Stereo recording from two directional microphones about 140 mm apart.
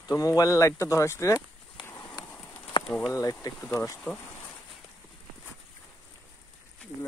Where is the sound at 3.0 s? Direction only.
25° left (ahead or behind).